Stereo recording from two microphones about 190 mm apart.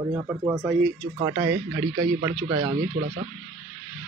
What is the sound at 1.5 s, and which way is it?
Speech, 55° right (ahead or behind).